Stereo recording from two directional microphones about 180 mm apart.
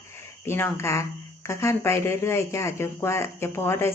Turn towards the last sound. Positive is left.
turn(degrees=15)  # may be behind; listen again after turning